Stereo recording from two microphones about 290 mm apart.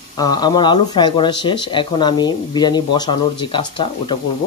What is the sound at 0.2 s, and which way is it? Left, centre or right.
Speech, centre.